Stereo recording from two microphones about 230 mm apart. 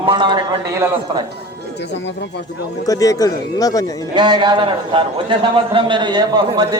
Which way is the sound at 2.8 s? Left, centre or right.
Centre.